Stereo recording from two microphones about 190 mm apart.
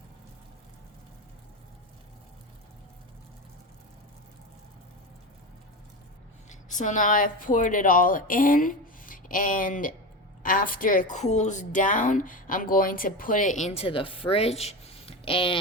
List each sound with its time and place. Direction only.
6.5 s a woman's voice: 40° left (ahead or behind)